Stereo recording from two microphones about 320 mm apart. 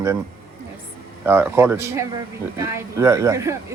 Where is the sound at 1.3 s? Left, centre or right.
Centre.